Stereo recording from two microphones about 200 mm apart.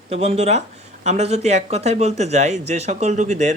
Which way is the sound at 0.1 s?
35° right (ahead or behind).